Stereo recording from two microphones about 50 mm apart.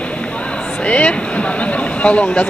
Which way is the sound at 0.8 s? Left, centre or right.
Left.